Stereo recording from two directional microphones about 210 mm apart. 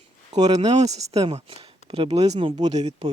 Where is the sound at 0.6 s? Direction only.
30° right (ahead or behind).